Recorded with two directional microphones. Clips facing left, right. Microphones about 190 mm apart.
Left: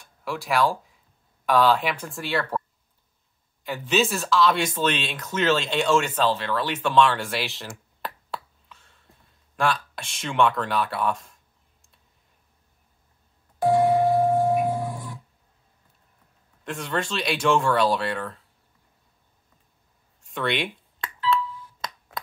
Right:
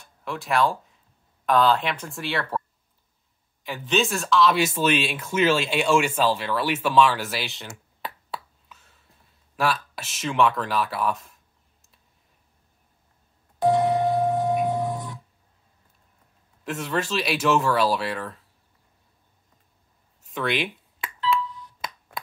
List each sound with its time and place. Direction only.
0.0 s speech: centre (ahead or behind)
3.6 s speech: centre (ahead or behind)
13.6 s music: 20° right (ahead or behind)
16.6 s speech: 5° right (ahead or behind)
20.2 s a sound: centre (ahead or behind)